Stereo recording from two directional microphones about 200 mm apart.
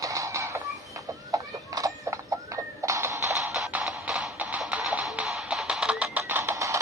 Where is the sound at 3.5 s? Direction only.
5° right (ahead or behind).